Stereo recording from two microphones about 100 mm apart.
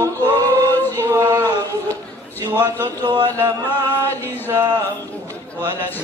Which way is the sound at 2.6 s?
45° right (ahead or behind).